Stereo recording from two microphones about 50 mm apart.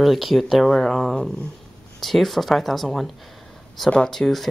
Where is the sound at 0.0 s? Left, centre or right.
Centre.